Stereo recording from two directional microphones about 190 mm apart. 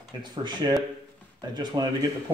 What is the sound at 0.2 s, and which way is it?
Speech, 25° right (ahead or behind).